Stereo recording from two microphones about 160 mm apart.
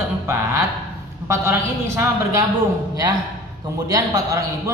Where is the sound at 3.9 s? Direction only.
20° right (ahead or behind).